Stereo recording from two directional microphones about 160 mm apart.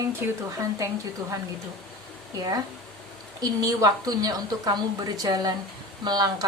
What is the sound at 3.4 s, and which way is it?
A woman's voice, 25° right (ahead or behind).